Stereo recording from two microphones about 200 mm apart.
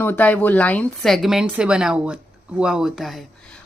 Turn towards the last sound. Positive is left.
turn(degrees=0)  # may be behind; listen again after turning